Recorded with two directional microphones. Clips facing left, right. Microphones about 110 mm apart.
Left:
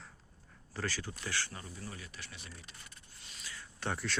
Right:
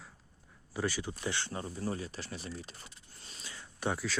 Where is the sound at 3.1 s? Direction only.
35° right (ahead or behind).